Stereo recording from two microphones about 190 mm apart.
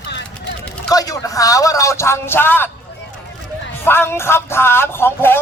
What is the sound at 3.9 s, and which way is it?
A man's voice, 10° left (ahead or behind).